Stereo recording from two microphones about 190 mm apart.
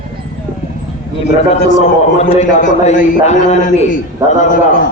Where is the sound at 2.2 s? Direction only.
35° left (ahead or behind).